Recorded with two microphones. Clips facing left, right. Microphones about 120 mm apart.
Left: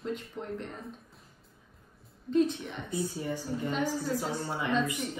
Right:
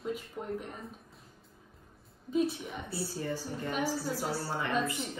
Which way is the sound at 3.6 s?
5° right (ahead or behind).